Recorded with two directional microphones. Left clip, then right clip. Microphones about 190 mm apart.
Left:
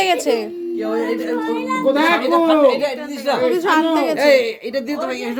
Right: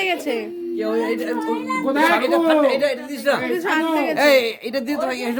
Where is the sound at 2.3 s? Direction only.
20° right (ahead or behind).